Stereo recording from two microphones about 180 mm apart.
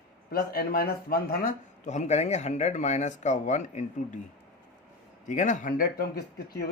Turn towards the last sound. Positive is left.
turn(degrees=60)  # may be behind; listen again after turning